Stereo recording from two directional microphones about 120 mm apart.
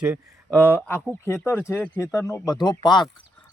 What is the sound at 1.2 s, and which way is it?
Speech, 20° left (ahead or behind).